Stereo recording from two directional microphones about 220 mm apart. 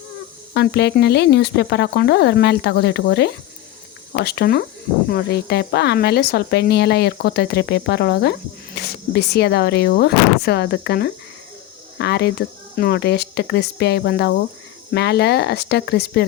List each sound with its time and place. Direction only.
0.5 s speech: 50° left (ahead or behind)